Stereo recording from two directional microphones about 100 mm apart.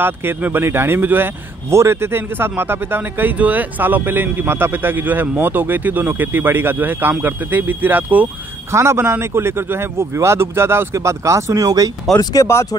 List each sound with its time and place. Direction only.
0.0 s speech: 20° right (ahead or behind); by 11.9 s 35° right (ahead or behind)
12.2 s speech: 40° left (ahead or behind)